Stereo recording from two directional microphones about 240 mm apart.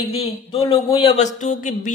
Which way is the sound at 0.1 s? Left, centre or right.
Left.